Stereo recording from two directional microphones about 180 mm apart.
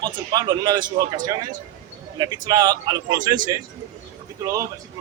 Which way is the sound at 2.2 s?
20° right (ahead or behind).